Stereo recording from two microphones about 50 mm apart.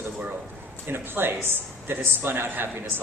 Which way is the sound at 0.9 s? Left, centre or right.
Right.